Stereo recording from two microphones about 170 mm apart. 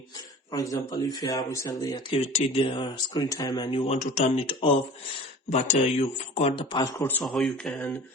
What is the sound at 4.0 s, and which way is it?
Speech, 45° left (ahead or behind).